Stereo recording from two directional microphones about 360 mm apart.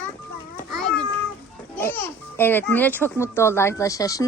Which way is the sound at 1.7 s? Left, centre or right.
Centre.